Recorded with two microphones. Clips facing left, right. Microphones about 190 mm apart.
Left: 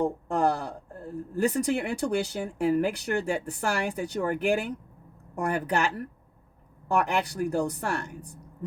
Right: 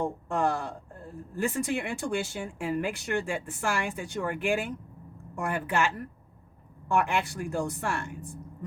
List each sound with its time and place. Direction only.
0.0 s speech: 35° left (ahead or behind)